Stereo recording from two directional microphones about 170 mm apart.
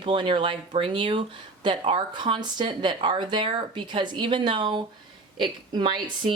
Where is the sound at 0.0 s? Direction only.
30° right (ahead or behind).